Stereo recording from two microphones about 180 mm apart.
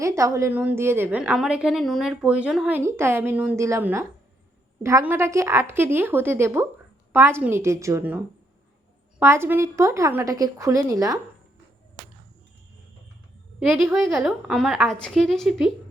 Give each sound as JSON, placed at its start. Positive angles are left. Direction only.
{"t": 0.0, "sound": "a woman's voice", "side_deg": -15}
{"t": 14.1, "sound": "a woman's voice", "side_deg": 0}